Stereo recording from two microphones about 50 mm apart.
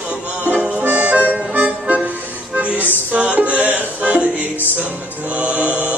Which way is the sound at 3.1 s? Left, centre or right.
Right.